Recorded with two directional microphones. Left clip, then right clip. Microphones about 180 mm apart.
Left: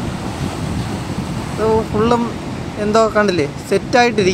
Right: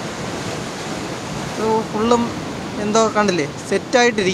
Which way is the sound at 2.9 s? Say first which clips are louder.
Left 3 dB; 15° left (ahead or behind).